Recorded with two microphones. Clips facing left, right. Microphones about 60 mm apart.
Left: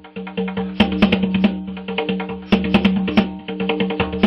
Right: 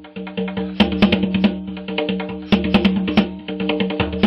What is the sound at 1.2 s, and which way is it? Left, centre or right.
Music, centre.